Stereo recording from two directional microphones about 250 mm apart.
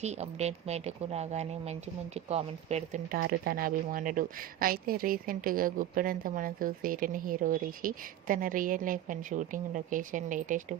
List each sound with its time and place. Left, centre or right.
0.0 s speech: right
3.2 s speech: right